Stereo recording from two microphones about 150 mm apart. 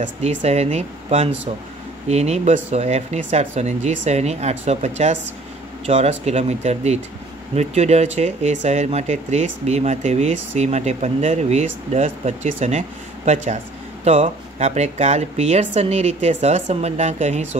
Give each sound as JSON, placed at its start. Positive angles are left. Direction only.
{"t": 0.0, "sound": "speech", "side_deg": -50}